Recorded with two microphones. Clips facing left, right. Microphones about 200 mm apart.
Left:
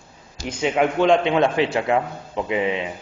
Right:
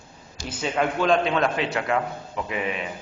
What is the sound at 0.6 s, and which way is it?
A man's voice, 20° left (ahead or behind).